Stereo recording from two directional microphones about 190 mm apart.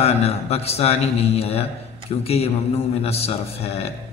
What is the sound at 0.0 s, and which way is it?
A man's voice, 30° left (ahead or behind).